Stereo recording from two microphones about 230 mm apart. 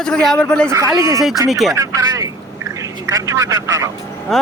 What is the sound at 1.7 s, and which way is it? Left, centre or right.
Speech, centre.